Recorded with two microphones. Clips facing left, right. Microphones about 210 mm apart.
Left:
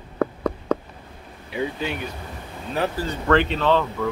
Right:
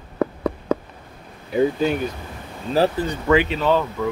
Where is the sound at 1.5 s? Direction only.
40° right (ahead or behind).